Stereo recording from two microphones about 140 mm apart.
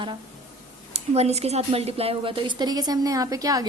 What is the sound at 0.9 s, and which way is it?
A woman's voice, 50° right (ahead or behind).